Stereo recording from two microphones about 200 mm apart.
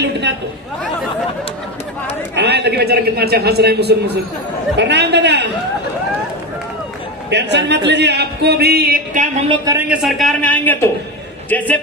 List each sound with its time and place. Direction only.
2.3 s a man's voice: 55° right (ahead or behind)
7.2 s a man's voice: 60° right (ahead or behind); by 9.3 s 40° right (ahead or behind)
9.5 s a man's voice: 15° right (ahead or behind)
10.0 s speech: centre (ahead or behind)